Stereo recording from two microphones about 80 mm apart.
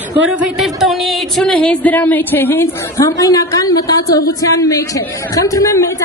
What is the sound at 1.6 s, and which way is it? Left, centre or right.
A woman's voice, centre.